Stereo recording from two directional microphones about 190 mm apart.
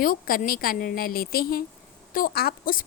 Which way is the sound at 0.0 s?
50° left (ahead or behind).